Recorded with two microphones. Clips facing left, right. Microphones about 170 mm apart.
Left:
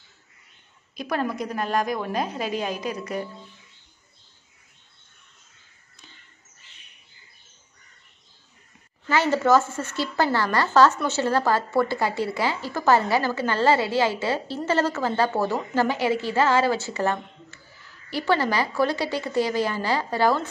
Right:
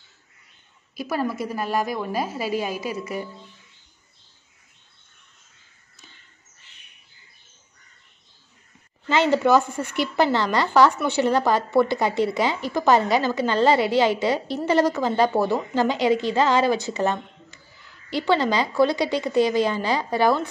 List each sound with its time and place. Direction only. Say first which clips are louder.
0.9 s a woman's voice: right 1 dB; 5° right (ahead or behind)
9.1 s speech: right 2 dB; 15° right (ahead or behind)